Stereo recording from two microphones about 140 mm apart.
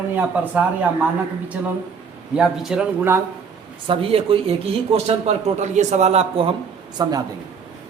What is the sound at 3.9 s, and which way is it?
Speech, 40° right (ahead or behind).